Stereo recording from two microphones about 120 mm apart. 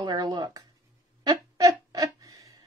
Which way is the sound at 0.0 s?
40° right (ahead or behind).